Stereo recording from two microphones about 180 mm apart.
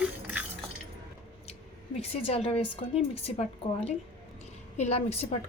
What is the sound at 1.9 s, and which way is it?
Speech, 30° left (ahead or behind).